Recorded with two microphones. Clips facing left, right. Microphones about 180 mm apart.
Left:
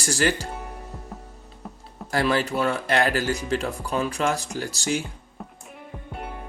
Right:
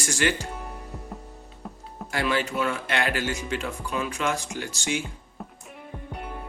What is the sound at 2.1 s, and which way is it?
Speech, 35° left (ahead or behind).